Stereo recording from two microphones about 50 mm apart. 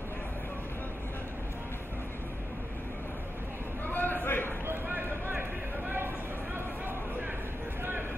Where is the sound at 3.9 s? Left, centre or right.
Left.